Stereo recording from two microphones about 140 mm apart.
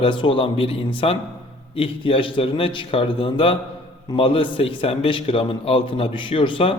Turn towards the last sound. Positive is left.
turn(degrees=40)  # may be behind; listen again after turning